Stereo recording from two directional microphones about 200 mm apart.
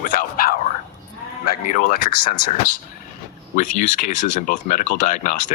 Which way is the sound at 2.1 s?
20° left (ahead or behind).